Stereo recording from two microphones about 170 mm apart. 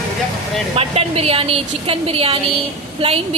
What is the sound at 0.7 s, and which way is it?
A woman's voice, 35° right (ahead or behind).